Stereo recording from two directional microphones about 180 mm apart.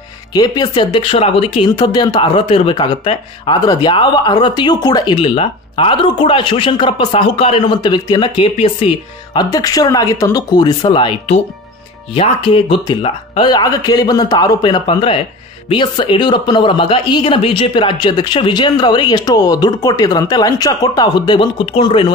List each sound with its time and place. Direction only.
0.3 s speech: 20° left (ahead or behind)